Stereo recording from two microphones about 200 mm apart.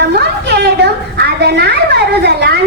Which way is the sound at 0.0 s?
55° right (ahead or behind).